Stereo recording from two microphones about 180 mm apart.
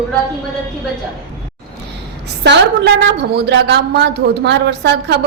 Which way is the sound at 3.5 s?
70° right (ahead or behind).